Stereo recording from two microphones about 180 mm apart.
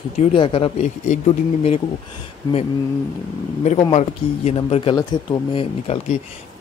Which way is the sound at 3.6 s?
40° left (ahead or behind).